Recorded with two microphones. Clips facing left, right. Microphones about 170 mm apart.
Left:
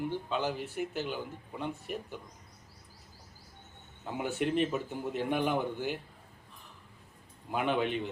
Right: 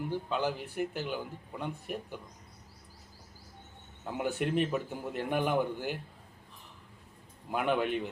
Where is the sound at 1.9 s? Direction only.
5° right (ahead or behind).